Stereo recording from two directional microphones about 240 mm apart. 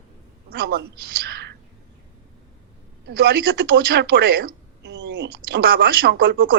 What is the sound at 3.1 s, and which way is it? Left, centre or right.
Speech, right.